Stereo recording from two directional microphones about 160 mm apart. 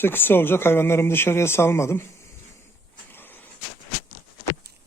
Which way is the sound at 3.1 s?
10° left (ahead or behind).